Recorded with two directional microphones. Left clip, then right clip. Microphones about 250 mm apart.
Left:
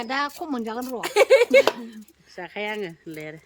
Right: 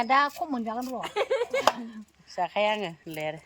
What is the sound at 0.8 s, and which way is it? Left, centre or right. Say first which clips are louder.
Speech: left 2 dB; centre.